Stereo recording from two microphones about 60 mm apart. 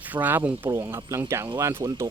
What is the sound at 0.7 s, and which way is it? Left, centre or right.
Speech, right.